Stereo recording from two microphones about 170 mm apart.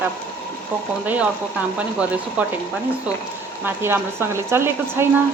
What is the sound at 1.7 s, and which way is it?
Speech, 5° right (ahead or behind).